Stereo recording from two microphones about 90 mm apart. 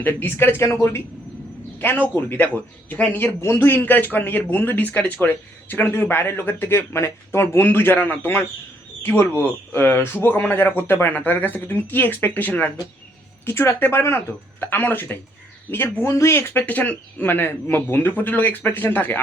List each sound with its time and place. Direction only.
0.0 s speech: 20° left (ahead or behind)